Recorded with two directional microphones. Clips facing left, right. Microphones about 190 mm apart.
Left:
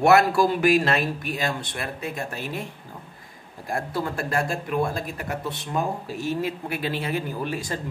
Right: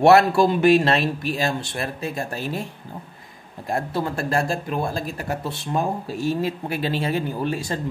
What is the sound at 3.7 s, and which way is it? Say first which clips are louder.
Speech: right 3 dB; 25° right (ahead or behind).